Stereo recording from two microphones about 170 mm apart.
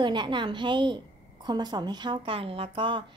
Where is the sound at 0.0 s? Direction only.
25° right (ahead or behind).